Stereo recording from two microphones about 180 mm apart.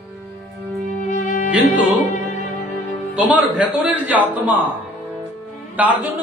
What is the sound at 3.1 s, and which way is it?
A man's voice, 10° right (ahead or behind).